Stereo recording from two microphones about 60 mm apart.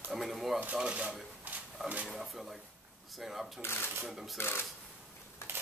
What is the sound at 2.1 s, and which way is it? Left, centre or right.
Speech, centre.